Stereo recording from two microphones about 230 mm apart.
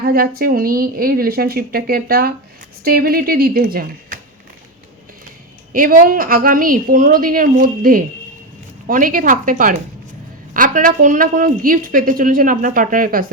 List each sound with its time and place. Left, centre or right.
0.0 s a woman's voice: right
5.7 s a woman's voice: right